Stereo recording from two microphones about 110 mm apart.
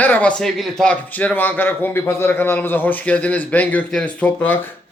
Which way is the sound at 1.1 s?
15° left (ahead or behind).